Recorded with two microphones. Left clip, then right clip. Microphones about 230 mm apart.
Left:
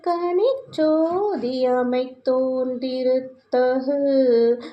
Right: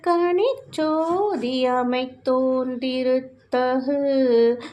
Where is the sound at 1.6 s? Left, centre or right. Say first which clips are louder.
Left 2 dB; right.